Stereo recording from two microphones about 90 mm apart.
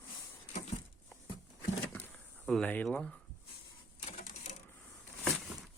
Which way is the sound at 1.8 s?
20° left (ahead or behind).